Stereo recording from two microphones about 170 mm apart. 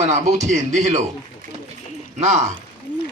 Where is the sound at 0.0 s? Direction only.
45° right (ahead or behind).